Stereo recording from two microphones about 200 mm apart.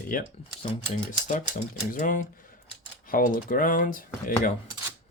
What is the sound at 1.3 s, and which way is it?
Speech, 35° left (ahead or behind).